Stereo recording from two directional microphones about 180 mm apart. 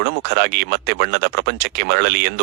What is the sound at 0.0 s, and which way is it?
Speech, 70° right (ahead or behind).